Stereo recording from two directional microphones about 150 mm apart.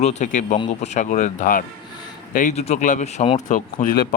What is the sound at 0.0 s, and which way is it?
Speech, 50° left (ahead or behind).